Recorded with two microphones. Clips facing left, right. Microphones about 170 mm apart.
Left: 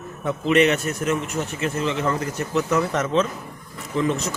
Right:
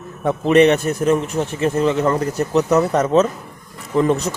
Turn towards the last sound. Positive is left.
turn(degrees=-45)  # may be behind; listen again after turning